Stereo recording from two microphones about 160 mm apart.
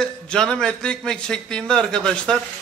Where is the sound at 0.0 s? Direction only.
5° left (ahead or behind).